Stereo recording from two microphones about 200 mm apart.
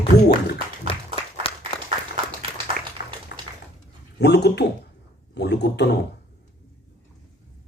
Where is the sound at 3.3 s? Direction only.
55° left (ahead or behind).